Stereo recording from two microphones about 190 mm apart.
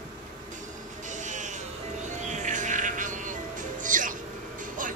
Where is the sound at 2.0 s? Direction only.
40° right (ahead or behind).